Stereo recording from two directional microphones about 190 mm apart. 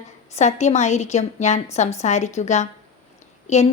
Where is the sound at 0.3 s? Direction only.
35° left (ahead or behind).